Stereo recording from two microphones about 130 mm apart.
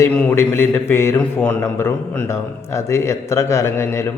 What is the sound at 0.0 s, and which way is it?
A man's voice, 15° left (ahead or behind).